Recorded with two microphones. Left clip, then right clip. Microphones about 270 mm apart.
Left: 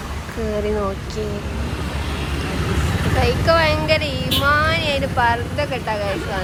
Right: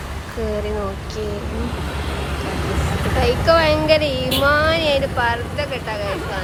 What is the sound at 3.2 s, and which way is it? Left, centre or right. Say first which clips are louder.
Speech: right 1 dB; centre.